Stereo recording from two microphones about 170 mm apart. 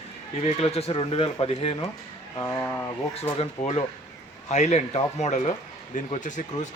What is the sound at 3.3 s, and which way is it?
Speech, 35° left (ahead or behind).